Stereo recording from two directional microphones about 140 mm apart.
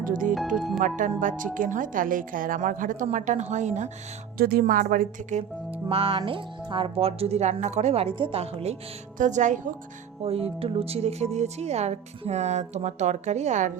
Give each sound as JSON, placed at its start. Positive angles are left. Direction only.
{"t": 0.0, "sound": "a woman's voice", "side_deg": -75}
{"t": 0.3, "sound": "speech", "side_deg": 0}
{"t": 0.8, "sound": "a woman's voice", "side_deg": -65}
{"t": 4.4, "sound": "a woman's voice", "side_deg": -90}
{"t": 5.9, "sound": "speech", "side_deg": -45}
{"t": 9.1, "sound": "speech", "side_deg": -65}
{"t": 10.2, "sound": "speech", "side_deg": -45}